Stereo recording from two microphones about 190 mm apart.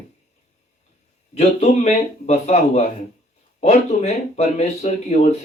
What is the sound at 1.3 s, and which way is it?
Speech, 35° left (ahead or behind).